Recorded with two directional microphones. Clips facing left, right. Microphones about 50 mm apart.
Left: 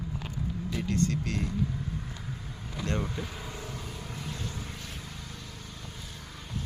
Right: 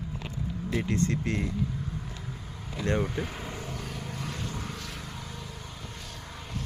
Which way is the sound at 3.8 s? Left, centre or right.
Right.